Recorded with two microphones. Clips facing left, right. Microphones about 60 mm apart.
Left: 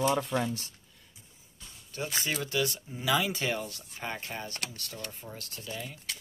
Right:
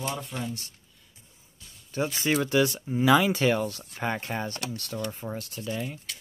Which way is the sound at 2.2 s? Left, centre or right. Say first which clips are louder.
Right 8 dB; right.